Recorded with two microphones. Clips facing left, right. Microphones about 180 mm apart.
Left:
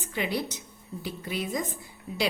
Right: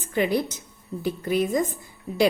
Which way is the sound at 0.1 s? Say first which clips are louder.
Right 7 dB; 50° right (ahead or behind).